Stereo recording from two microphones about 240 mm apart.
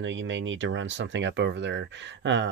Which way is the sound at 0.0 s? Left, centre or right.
Right.